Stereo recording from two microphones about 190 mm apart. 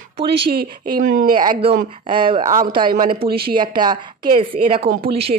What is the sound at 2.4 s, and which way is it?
Speech, 45° right (ahead or behind).